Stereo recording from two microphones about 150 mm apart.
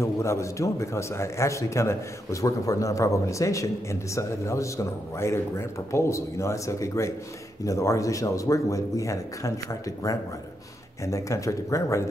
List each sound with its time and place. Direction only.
0.0 s a man's voice: 20° left (ahead or behind)